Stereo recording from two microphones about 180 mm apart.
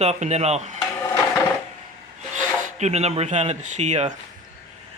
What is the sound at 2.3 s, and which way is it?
Filing, 40° right (ahead or behind).